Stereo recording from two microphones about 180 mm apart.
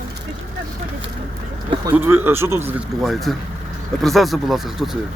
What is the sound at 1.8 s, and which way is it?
Speech, 15° right (ahead or behind).